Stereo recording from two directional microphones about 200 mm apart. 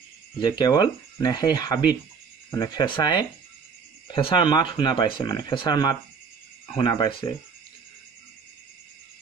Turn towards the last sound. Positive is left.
turn(degrees=20)  # may be behind; listen again after turning